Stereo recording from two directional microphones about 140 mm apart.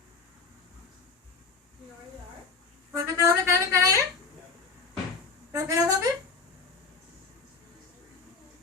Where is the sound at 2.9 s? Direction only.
20° right (ahead or behind).